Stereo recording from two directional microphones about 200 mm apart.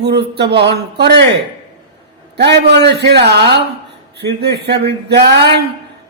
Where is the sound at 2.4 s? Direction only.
55° right (ahead or behind).